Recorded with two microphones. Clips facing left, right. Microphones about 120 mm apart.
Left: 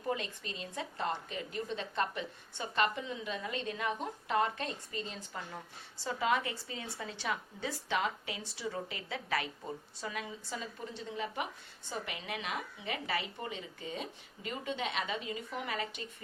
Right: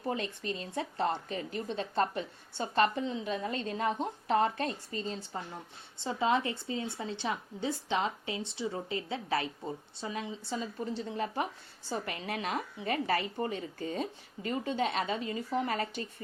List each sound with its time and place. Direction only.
0.1 s a woman's voice: 35° right (ahead or behind)